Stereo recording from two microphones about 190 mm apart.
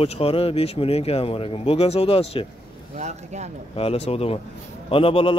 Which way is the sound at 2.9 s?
40° right (ahead or behind).